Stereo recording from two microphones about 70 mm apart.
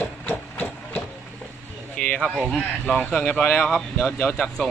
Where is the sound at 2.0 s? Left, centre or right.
Centre.